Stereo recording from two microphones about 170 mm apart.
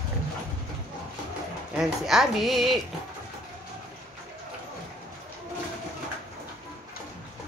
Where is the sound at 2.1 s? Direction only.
Centre (ahead or behind).